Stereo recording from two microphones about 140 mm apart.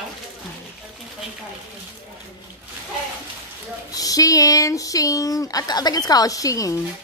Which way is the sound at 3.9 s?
25° left (ahead or behind).